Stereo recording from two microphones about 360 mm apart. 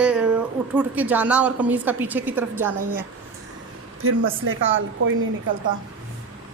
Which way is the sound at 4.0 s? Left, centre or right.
Right.